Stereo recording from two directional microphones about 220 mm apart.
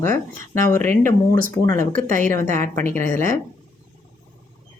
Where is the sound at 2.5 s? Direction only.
10° left (ahead or behind).